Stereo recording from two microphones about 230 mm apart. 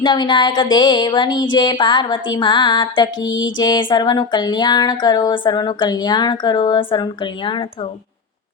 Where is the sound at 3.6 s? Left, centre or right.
Centre.